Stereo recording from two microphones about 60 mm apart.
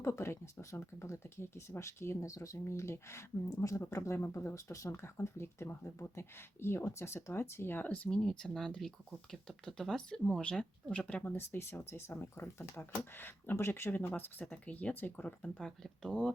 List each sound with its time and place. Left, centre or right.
0.0 s speech: left
4.5 s speech: left
8.1 s speech: centre
10.9 s speech: left
11.5 s speech: left
13.9 s speech: left
14.5 s speech: left
15.4 s speech: centre